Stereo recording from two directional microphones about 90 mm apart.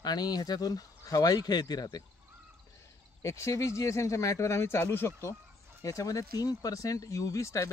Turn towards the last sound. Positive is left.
turn(degrees=35)  # may be behind; listen again after turning